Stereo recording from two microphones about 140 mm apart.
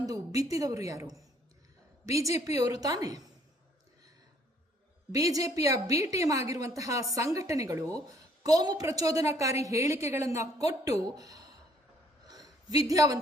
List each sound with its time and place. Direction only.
0.0 s a woman's voice: 25° right (ahead or behind)
5.1 s a woman's voice: 25° right (ahead or behind)
12.3 s a sound: 25° right (ahead or behind)